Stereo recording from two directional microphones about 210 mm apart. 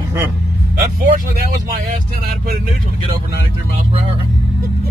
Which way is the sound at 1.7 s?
45° right (ahead or behind).